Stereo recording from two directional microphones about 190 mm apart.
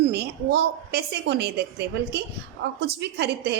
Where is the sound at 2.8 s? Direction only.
60° right (ahead or behind).